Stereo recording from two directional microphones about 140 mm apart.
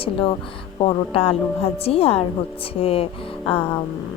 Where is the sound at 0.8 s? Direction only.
40° left (ahead or behind).